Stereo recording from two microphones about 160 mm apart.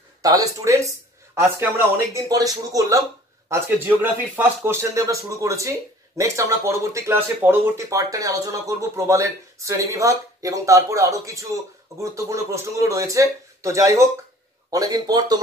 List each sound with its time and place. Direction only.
0.2 s speech: 20° right (ahead or behind)